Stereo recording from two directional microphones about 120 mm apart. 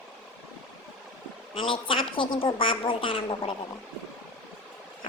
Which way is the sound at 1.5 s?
50° left (ahead or behind).